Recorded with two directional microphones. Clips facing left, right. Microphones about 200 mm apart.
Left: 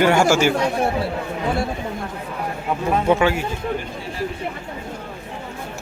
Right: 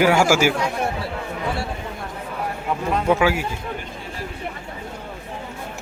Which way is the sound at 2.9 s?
Centre (ahead or behind).